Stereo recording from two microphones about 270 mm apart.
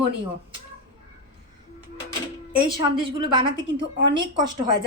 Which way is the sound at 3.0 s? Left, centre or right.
Centre.